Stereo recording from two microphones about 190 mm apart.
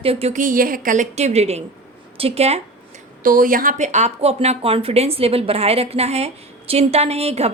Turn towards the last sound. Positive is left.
turn(degrees=-35)  # may be behind; listen again after turning